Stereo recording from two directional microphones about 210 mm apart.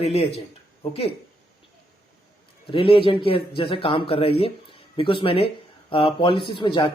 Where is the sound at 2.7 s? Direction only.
25° left (ahead or behind).